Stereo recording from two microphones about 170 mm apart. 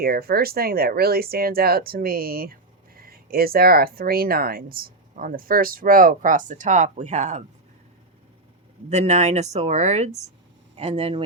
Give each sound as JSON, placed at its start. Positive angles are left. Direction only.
{"t": 0.0, "sound": "speech", "side_deg": -60}
{"t": 8.9, "sound": "speech", "side_deg": -40}